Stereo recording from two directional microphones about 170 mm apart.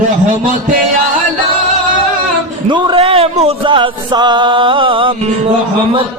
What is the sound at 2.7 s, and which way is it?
Music, 30° right (ahead or behind).